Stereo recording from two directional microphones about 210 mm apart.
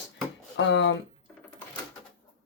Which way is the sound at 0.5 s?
60° left (ahead or behind).